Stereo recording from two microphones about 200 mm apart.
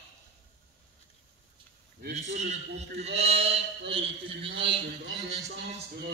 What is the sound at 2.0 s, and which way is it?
Mantra, 50° right (ahead or behind).